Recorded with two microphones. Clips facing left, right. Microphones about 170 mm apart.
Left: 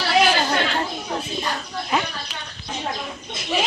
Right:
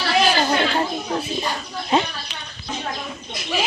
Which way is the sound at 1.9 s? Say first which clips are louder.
Right 4 dB; 25° right (ahead or behind).